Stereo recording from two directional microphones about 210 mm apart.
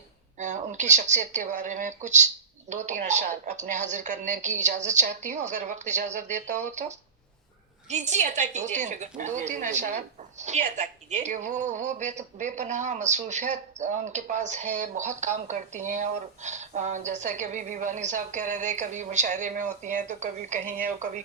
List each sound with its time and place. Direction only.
0.3 s a woman's voice: 35° right (ahead or behind)